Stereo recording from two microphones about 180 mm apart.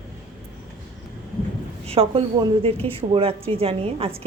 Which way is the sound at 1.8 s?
30° right (ahead or behind).